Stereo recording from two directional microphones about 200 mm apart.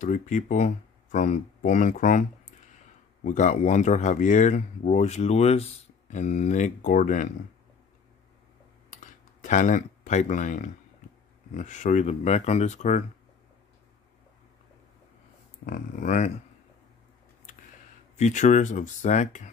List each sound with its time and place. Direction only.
0.0 s speech: 40° left (ahead or behind)
3.3 s speech: 35° left (ahead or behind)
9.0 s speech: 40° left (ahead or behind)
15.6 s speech: 40° left (ahead or behind)
18.1 s speech: 35° left (ahead or behind)